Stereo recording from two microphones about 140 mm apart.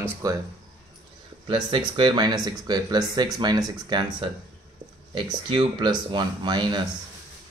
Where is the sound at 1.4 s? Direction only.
35° right (ahead or behind).